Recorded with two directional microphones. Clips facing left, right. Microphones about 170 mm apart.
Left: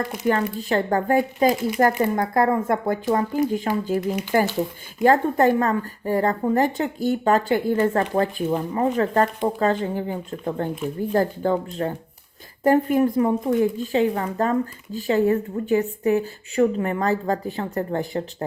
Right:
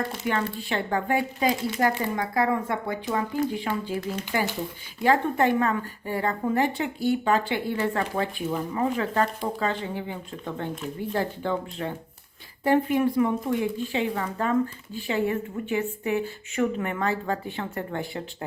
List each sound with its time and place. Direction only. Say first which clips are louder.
0.2 s a woman's voice: left 8 dB; 40° left (ahead or behind)